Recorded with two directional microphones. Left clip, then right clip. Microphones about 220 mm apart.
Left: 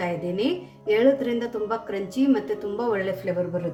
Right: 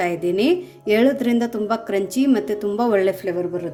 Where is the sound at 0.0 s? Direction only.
50° right (ahead or behind).